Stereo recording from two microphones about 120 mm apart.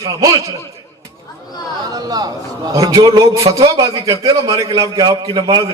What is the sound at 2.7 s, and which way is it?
A man's voice, 30° right (ahead or behind).